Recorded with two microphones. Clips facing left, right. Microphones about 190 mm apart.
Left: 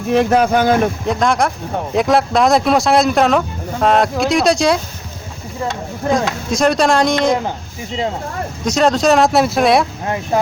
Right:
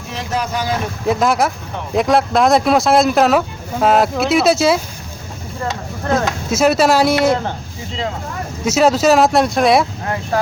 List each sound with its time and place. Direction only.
0.1 s speech: 55° left (ahead or behind)
1.0 s speech: 5° right (ahead or behind)
6.1 s speech: 5° right (ahead or behind)
8.6 s speech: 5° right (ahead or behind)
10.3 s speech: 20° left (ahead or behind)